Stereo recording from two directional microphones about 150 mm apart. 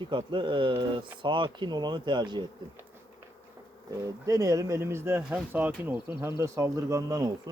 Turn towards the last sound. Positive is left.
turn(degrees=-25)  # may be behind; listen again after turning